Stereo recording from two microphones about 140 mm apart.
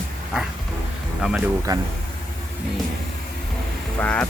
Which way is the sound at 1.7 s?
25° right (ahead or behind).